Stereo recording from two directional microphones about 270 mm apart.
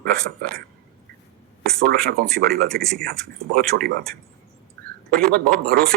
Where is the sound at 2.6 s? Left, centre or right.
Centre.